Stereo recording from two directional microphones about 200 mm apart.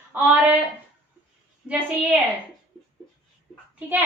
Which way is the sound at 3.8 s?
10° right (ahead or behind).